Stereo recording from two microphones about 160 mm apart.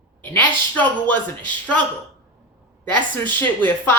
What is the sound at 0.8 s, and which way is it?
Speech, 10° left (ahead or behind).